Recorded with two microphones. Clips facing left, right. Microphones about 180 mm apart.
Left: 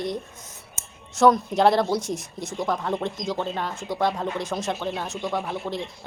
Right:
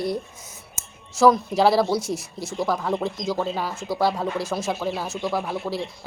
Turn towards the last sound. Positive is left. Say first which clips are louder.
# right 2 dB
turn(degrees=-5)  # may be behind; listen again after turning